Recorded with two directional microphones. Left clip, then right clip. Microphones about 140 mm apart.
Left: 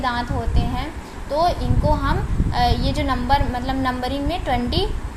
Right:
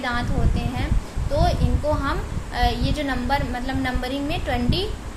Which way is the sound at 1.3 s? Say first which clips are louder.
Left 4 dB; 20° left (ahead or behind).